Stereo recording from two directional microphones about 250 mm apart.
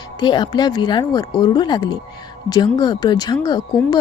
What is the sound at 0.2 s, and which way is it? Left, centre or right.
Speech, centre.